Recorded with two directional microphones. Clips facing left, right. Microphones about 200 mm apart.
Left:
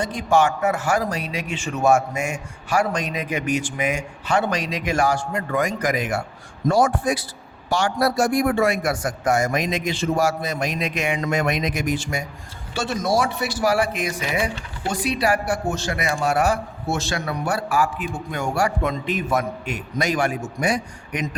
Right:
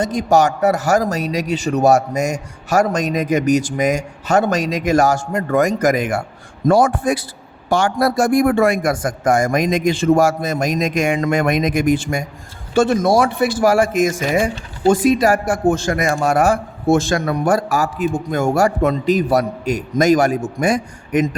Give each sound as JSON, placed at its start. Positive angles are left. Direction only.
{"t": 0.0, "sound": "a man's voice", "side_deg": -40}